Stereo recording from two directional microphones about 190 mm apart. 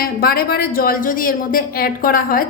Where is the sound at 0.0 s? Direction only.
50° left (ahead or behind).